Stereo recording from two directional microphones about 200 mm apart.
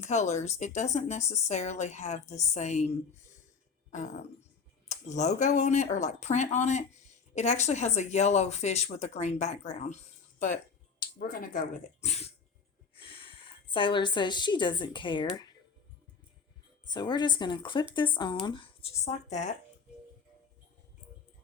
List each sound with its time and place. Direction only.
0.0 s speech: 35° left (ahead or behind)
3.9 s speech: 35° left (ahead or behind)
4.9 s a sound: 35° left (ahead or behind)
5.4 s speech: 35° left (ahead or behind)
11.3 s speech: 40° left (ahead or behind); by 15.3 s 25° left (ahead or behind)
16.9 s speech: 20° left (ahead or behind)